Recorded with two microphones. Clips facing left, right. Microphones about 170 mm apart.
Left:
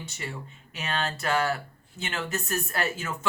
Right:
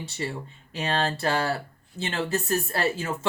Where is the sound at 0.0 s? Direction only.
30° right (ahead or behind).